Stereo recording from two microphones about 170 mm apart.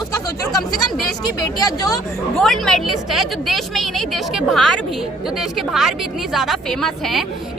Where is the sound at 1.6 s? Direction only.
20° left (ahead or behind).